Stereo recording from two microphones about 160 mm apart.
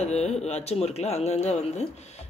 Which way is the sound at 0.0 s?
45° left (ahead or behind).